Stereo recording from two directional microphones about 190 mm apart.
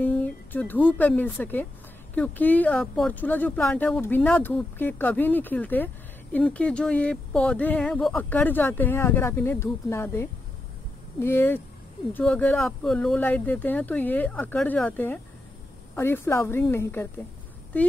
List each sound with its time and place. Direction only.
0.0 s speech: 10° left (ahead or behind)